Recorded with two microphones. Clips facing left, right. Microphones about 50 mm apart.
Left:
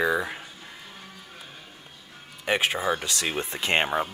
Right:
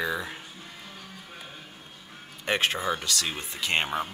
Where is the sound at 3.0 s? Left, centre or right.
Left.